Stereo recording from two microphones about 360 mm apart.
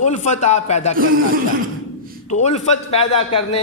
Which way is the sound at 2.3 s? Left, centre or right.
Centre.